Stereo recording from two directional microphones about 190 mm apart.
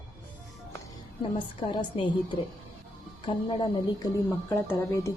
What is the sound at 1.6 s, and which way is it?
Speech, 25° left (ahead or behind).